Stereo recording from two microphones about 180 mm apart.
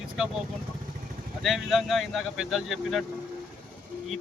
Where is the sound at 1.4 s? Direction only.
Centre (ahead or behind).